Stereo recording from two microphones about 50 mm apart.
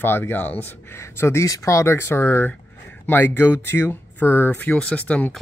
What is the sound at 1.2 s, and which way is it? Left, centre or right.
Speech, left.